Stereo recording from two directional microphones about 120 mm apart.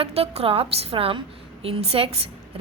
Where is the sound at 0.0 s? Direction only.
55° right (ahead or behind).